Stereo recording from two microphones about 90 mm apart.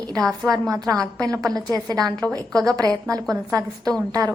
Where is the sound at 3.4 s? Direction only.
40° right (ahead or behind).